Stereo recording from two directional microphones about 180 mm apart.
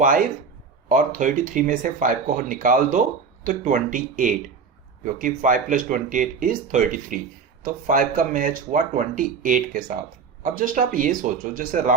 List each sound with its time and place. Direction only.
0.0 s speech: 50° right (ahead or behind)